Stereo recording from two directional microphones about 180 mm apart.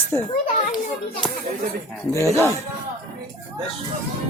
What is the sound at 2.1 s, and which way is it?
Speech, 15° left (ahead or behind).